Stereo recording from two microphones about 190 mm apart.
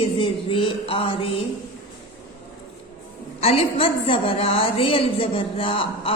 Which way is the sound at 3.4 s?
30° left (ahead or behind).